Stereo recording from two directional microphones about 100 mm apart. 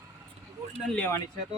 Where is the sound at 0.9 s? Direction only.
15° left (ahead or behind).